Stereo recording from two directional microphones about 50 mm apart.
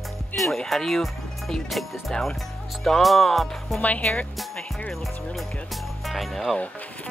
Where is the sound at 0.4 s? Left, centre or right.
Centre.